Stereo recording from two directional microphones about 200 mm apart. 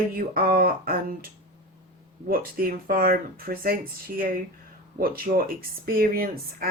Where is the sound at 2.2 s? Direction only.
45° right (ahead or behind).